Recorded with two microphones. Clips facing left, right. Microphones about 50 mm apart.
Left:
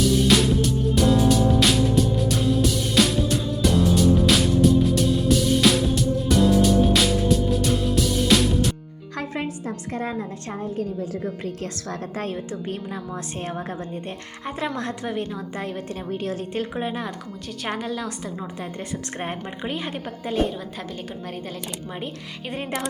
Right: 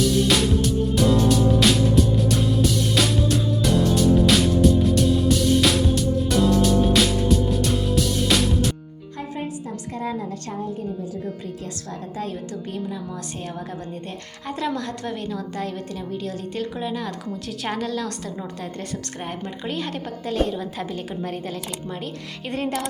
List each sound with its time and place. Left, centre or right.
0.0 s music: centre
9.6 s a sound: left
10.6 s a woman's voice: left
14.4 s a woman's voice: left
16.0 s a woman's voice: left
17.7 s a woman's voice: centre
20.4 s a woman's voice: centre